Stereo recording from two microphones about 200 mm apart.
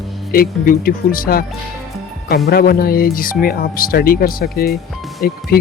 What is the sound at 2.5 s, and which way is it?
Speech, 50° left (ahead or behind).